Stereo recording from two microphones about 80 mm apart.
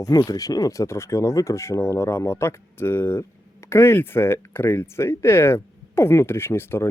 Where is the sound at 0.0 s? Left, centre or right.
Left.